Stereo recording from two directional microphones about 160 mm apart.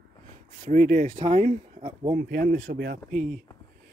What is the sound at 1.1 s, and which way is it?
Speech, 30° right (ahead or behind).